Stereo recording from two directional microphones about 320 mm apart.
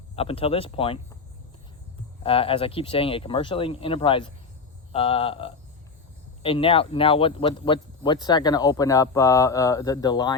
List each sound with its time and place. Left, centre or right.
0.2 s speech: centre
2.2 s speech: centre